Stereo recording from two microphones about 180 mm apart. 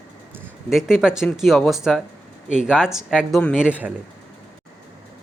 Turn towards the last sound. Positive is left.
turn(degrees=-5)  # may be behind; listen again after turning